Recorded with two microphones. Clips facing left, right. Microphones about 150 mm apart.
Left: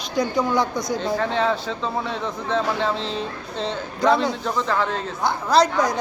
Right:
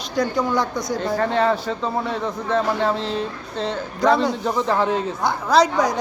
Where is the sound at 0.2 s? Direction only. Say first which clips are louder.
Even; centre (ahead or behind).